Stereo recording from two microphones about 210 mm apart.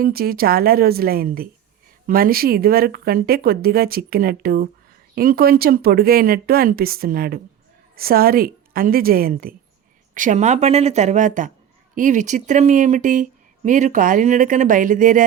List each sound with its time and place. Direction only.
0.0 s speech: 45° right (ahead or behind)